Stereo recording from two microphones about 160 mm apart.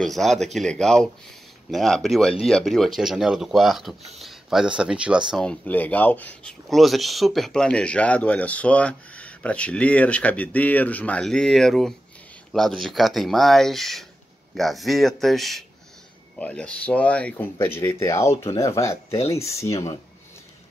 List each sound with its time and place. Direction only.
0.0 s speech: centre (ahead or behind)
5.3 s speech: 5° left (ahead or behind)